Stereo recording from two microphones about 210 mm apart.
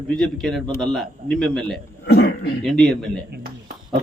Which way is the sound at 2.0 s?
55° left (ahead or behind).